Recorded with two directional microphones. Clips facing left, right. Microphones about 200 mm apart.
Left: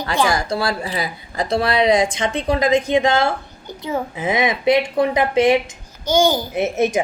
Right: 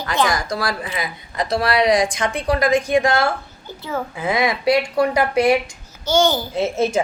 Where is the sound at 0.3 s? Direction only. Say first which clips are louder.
Left 2 dB; 25° left (ahead or behind).